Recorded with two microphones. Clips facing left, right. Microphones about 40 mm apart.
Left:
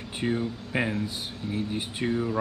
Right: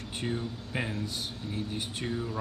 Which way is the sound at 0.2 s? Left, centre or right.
Centre.